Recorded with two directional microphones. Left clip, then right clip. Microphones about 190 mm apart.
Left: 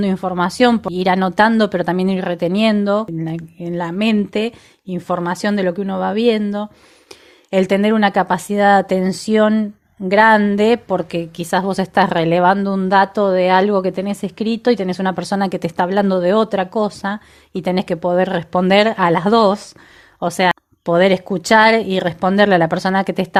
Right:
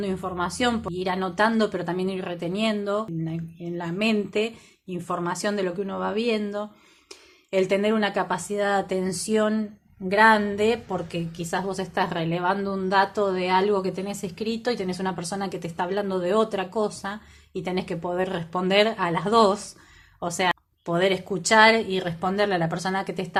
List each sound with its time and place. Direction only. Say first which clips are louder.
0.0 s a woman's voice: left 9 dB; 50° left (ahead or behind)
10.1 s a woman's voice: left 7 dB; 50° left (ahead or behind)